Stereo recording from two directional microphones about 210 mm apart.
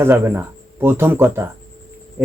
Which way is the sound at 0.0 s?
10° right (ahead or behind).